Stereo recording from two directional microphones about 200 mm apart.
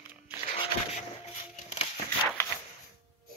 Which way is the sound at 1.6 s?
35° left (ahead or behind).